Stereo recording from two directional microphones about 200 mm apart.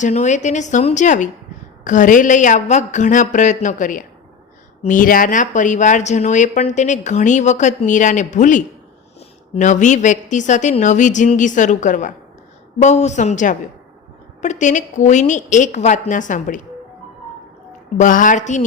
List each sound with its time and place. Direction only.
0.0 s speech: 35° left (ahead or behind)
17.9 s speech: 40° left (ahead or behind)